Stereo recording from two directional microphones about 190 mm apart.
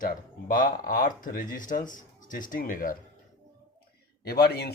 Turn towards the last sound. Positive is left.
turn(degrees=60)  # may be behind; listen again after turning